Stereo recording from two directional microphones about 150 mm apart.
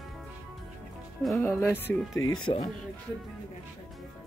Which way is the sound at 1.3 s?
15° left (ahead or behind).